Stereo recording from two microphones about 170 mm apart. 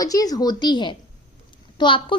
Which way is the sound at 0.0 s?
20° left (ahead or behind).